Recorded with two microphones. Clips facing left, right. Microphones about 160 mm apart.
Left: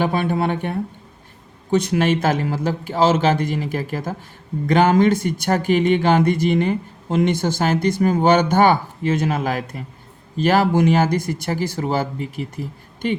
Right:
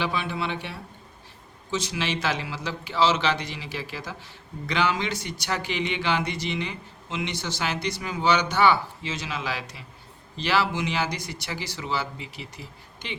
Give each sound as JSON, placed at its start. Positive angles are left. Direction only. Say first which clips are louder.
{"t": 0.0, "sound": "speech", "louder": "left 9 dB", "side_deg": 50}